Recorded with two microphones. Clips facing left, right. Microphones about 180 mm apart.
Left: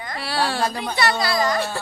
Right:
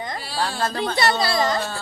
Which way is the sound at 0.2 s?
70° left (ahead or behind).